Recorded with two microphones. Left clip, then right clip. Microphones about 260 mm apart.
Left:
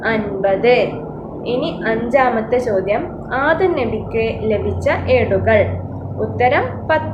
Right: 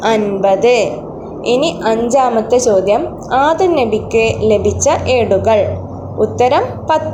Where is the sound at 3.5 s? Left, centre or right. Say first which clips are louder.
Right 4 dB; right.